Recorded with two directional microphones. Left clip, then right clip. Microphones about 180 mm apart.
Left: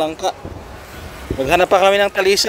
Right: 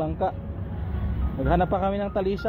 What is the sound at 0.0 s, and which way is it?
Speech, 70° left (ahead or behind).